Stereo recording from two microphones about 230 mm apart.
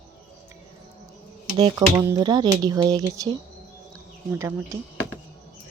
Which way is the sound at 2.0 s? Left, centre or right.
Centre.